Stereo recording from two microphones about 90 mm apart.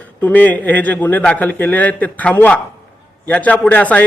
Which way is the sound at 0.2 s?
20° left (ahead or behind).